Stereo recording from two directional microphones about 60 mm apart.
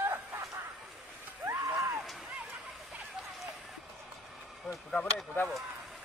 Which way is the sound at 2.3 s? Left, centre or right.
Right.